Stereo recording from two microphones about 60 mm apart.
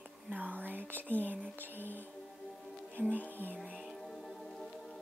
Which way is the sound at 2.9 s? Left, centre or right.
Right.